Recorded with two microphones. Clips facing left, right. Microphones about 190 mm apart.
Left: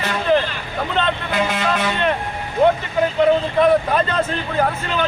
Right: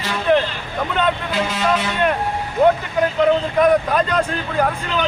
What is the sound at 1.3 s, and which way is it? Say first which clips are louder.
Speech: right 1 dB; 55° left (ahead or behind).